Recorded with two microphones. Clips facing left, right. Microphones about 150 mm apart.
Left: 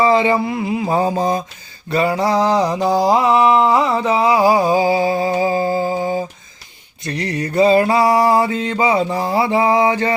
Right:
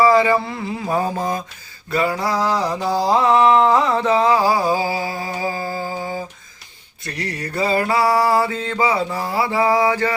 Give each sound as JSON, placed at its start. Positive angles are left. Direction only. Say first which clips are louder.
{"t": 0.0, "sound": "a man's voice", "louder": "even", "side_deg": 25}
{"t": 0.9, "sound": "mantra", "louder": "left 3 dB", "side_deg": 25}